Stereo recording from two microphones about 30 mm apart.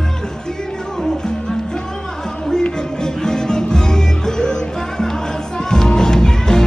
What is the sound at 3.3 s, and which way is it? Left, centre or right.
Music, left.